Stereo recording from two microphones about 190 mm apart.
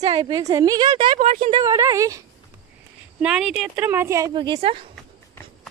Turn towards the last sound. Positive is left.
turn(degrees=-30)  # may be behind; listen again after turning